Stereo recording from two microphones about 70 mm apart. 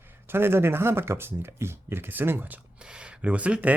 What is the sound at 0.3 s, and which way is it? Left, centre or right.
Speech, right.